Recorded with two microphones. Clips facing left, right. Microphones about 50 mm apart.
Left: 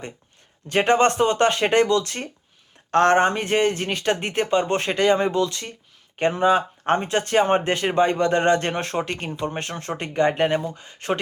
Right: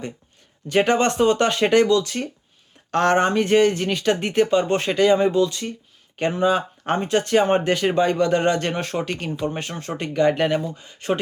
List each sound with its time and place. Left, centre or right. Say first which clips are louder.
0.7 s speech: even; left